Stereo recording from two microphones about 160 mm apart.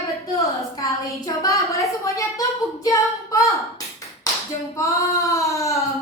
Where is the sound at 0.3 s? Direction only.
20° left (ahead or behind).